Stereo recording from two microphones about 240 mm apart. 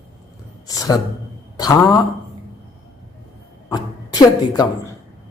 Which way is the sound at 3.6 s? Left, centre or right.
Centre.